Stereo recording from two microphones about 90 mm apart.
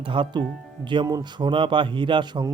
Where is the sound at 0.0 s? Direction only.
65° right (ahead or behind).